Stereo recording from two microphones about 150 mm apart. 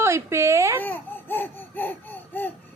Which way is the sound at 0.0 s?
20° right (ahead or behind).